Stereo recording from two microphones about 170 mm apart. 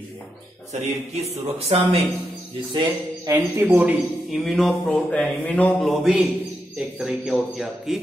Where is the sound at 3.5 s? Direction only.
10° right (ahead or behind).